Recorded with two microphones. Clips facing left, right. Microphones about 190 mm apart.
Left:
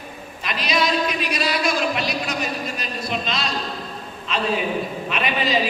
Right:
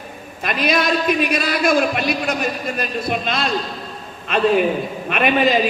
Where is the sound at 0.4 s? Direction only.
55° right (ahead or behind).